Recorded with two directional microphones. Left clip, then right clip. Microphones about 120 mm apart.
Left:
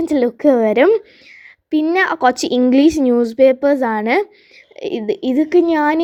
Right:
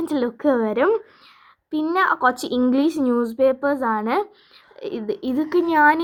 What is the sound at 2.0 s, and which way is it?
A woman's voice, 40° left (ahead or behind).